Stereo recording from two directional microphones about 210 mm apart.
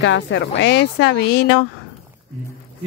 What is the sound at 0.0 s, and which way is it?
Speech, 60° left (ahead or behind).